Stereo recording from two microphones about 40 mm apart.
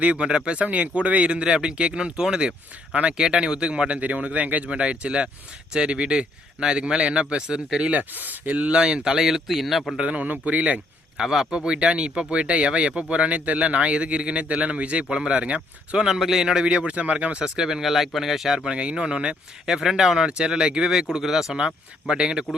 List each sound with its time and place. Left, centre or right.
0.2 s a man's voice: right
2.9 s speech: right
3.2 s speech: centre; by 4.7 s right
4.7 s a man's voice: right
7.9 s speech: right
8.7 s speech: right; by 9.8 s centre
10.0 s speech: right
11.2 s speech: centre
11.5 s a man's voice: right
16.0 s speech: centre
16.6 s speech: right
17.6 s speech: centre
18.7 s a man's voice: right
19.7 s speech: centre